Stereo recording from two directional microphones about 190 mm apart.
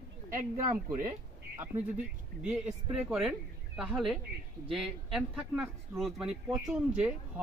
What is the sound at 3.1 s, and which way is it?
Speech, centre (ahead or behind).